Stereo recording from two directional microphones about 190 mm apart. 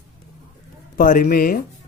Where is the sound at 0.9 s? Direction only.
45° left (ahead or behind).